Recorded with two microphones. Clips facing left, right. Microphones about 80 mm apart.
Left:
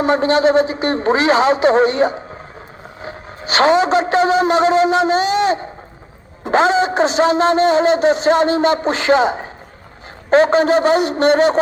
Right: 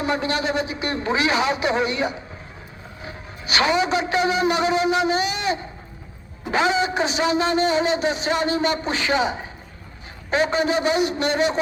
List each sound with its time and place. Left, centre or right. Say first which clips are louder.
0.0 s a man's voice: left 9 dB; left